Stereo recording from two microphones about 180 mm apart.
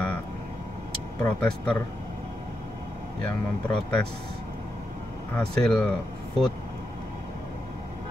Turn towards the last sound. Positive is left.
turn(degrees=5)  # may be behind; listen again after turning